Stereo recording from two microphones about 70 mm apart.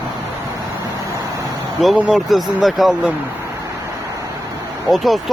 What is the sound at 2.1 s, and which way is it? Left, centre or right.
Speech, centre.